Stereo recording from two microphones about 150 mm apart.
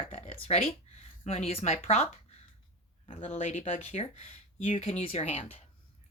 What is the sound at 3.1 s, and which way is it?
Speech, 40° left (ahead or behind).